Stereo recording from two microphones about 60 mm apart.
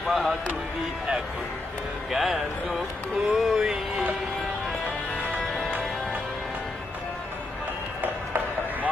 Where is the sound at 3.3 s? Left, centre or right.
Centre.